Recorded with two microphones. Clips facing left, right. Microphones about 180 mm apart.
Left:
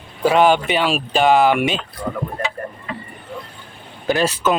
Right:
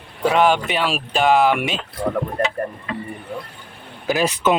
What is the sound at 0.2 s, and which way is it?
Speech, centre (ahead or behind).